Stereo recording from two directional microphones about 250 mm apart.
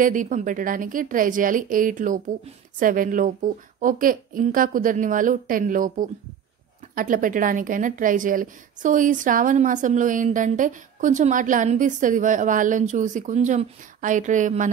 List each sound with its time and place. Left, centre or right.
0.0 s a woman's voice: right